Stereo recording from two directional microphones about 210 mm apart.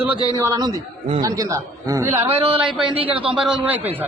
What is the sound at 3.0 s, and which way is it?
Speech, 25° right (ahead or behind).